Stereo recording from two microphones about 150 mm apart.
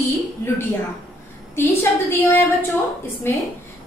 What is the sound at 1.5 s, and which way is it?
A woman's voice, 15° left (ahead or behind).